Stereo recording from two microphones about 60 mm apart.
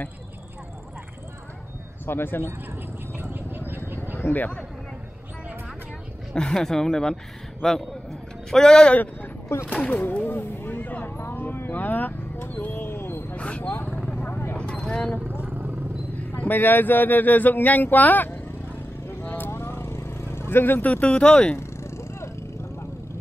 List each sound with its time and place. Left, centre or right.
2.0 s speech: left
3.2 s a sound: right
4.3 s speech: left
6.3 s a man's voice: centre
8.9 s speech: left
11.1 s vehicle: left
13.4 s vehicle: centre
15.2 s vehicle: right
16.2 s speech: left
19.0 s vehicle: left
20.9 s speech: centre
21.5 s vehicle: left